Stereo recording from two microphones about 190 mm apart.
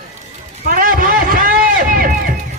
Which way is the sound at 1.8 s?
50° right (ahead or behind).